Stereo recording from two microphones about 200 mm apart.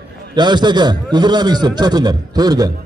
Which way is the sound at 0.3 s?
20° right (ahead or behind).